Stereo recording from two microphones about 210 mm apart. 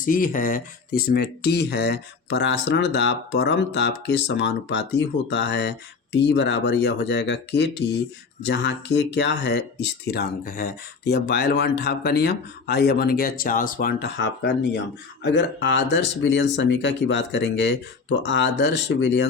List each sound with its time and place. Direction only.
0.0 s speech: 40° left (ahead or behind); by 19.3 s 55° left (ahead or behind)